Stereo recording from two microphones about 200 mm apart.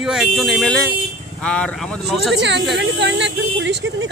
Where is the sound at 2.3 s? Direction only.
65° right (ahead or behind).